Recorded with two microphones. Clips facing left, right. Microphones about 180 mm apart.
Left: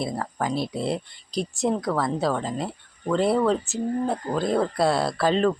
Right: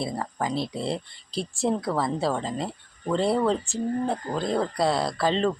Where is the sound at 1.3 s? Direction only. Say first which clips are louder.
Left 3 dB; 30° right (ahead or behind).